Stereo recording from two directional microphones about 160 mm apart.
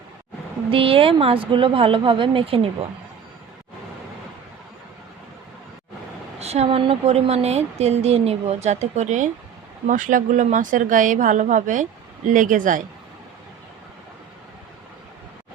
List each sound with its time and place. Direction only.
0.7 s speech: 35° right (ahead or behind)
6.4 s a woman's voice: 40° right (ahead or behind)